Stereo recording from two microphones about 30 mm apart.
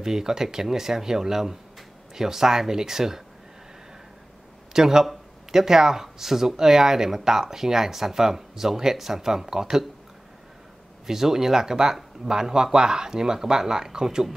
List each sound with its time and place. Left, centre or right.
0.0 s speech: centre
4.7 s speech: centre
11.1 s speech: centre